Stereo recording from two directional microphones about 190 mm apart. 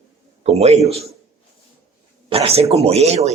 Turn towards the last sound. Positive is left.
turn(degrees=-35)  # may be behind; listen again after turning